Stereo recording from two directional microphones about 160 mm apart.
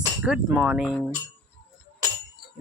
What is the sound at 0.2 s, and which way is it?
Speech, 10° right (ahead or behind).